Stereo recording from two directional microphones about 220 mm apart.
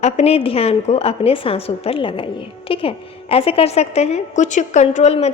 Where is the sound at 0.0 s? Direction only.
30° left (ahead or behind).